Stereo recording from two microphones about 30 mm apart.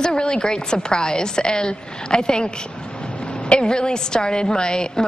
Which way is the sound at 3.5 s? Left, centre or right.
Left.